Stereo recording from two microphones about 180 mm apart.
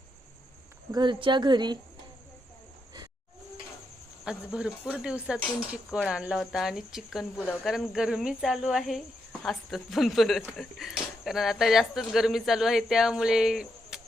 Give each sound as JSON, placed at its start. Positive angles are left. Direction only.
{"t": 0.9, "sound": "speech", "side_deg": -25}
{"t": 4.3, "sound": "speech", "side_deg": -5}